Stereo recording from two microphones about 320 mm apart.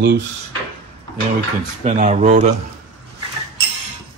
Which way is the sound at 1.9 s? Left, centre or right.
Right.